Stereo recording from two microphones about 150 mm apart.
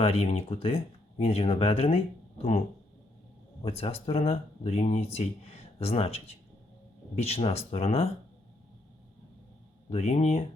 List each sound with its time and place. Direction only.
0.0 s speech: 45° left (ahead or behind)
3.6 s speech: 40° left (ahead or behind)
9.9 s speech: 50° left (ahead or behind)